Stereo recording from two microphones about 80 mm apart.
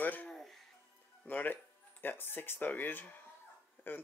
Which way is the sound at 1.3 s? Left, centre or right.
Left.